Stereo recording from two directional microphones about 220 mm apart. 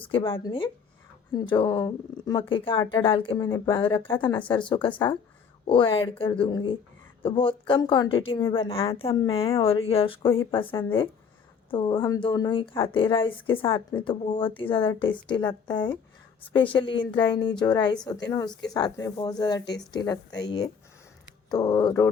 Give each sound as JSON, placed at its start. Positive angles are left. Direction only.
{"t": 0.0, "sound": "speech", "side_deg": 25}
{"t": 21.5, "sound": "speech", "side_deg": 20}